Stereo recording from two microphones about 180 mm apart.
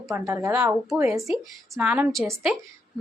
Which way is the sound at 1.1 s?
Centre (ahead or behind).